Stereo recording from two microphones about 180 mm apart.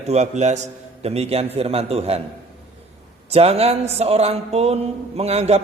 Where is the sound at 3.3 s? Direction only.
35° right (ahead or behind).